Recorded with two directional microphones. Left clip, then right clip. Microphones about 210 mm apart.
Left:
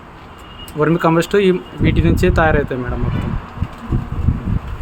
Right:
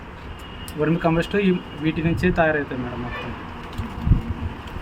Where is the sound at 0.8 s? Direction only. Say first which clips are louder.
Left 7 dB; 55° left (ahead or behind).